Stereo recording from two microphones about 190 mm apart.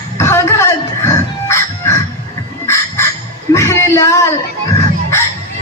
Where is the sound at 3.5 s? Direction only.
15° left (ahead or behind).